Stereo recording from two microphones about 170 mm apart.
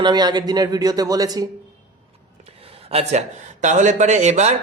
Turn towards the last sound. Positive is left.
turn(degrees=-45)  # may be behind; listen again after turning